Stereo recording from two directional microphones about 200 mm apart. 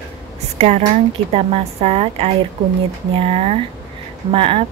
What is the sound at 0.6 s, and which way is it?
A woman's voice, 30° right (ahead or behind).